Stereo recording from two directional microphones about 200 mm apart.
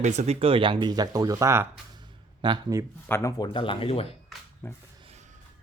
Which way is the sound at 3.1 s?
15° left (ahead or behind).